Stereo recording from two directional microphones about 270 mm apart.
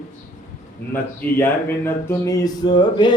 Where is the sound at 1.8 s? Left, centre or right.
Centre.